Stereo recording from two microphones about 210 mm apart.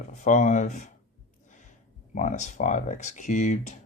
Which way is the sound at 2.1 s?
35° left (ahead or behind).